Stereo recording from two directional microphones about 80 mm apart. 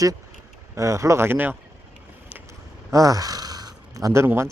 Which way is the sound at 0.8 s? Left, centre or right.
Right.